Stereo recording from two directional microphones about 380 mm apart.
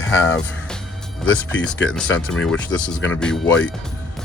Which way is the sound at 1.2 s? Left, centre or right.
Left.